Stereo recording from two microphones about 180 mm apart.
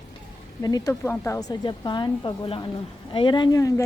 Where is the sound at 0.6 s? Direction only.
20° left (ahead or behind).